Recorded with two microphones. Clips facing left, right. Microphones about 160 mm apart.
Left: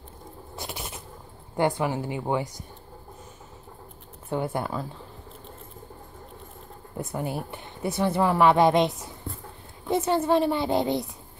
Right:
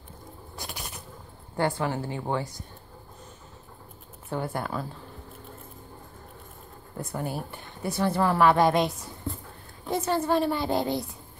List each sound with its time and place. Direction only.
0.6 s a sound: 25° left (ahead or behind)
1.6 s a woman's voice: 15° left (ahead or behind)
4.3 s a woman's voice: 20° left (ahead or behind)
7.0 s a woman's voice: 20° left (ahead or behind)